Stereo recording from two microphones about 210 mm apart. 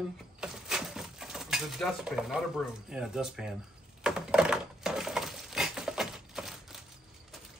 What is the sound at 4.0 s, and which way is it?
Dishes, 5° right (ahead or behind).